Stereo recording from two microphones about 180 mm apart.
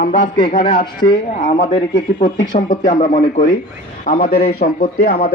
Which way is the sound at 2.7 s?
40° left (ahead or behind).